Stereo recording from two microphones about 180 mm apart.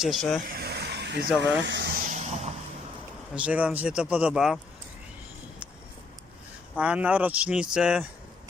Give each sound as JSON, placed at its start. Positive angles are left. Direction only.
{"t": 0.0, "sound": "speech", "side_deg": 0}
{"t": 0.5, "sound": "a sound", "side_deg": -60}
{"t": 1.4, "sound": "speech", "side_deg": -75}
{"t": 2.0, "sound": "vehicle", "side_deg": -40}
{"t": 3.3, "sound": "speech", "side_deg": -5}
{"t": 6.7, "sound": "speech", "side_deg": -5}